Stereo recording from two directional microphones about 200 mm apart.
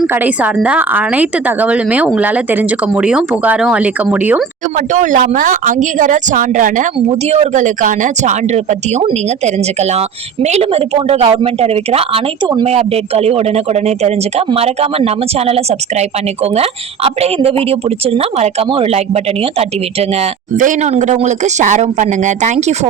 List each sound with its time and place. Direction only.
0.1 s a woman's voice: 5° right (ahead or behind)
4.9 s a woman's voice: 40° right (ahead or behind)
10.4 s a woman's voice: 30° right (ahead or behind)